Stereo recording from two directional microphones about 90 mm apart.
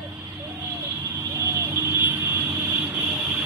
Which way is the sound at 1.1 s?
25° right (ahead or behind).